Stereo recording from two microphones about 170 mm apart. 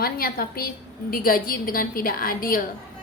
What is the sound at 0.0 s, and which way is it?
A woman's voice, 60° left (ahead or behind).